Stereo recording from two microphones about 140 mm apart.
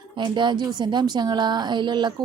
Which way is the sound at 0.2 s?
35° right (ahead or behind).